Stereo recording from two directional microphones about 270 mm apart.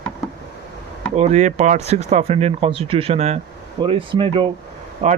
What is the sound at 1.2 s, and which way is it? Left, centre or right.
Speech, right.